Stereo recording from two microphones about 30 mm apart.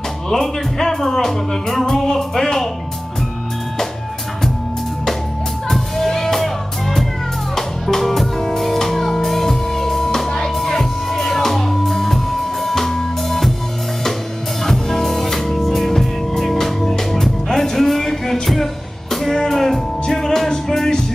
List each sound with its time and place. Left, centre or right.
0.3 s speech: centre
5.7 s music: centre
14.6 s music: centre